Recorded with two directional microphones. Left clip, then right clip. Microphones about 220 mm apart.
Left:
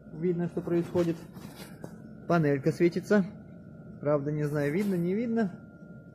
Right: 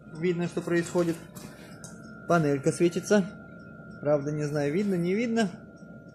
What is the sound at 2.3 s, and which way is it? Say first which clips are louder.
Speech: right 2 dB; centre (ahead or behind).